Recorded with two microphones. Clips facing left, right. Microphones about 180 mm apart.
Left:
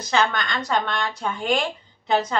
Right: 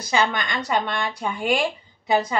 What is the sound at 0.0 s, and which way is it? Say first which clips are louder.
Speech: even; 10° right (ahead or behind).